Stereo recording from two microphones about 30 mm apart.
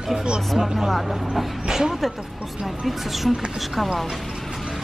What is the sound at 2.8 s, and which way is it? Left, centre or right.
Speech, centre.